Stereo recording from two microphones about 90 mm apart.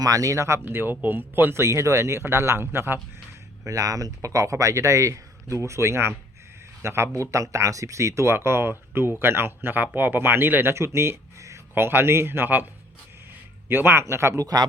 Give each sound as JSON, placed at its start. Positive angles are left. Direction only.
{"t": 0.0, "sound": "speech", "side_deg": -40}
{"t": 3.6, "sound": "speech", "side_deg": -40}
{"t": 13.7, "sound": "speech", "side_deg": -25}
{"t": 14.4, "sound": "speech", "side_deg": -50}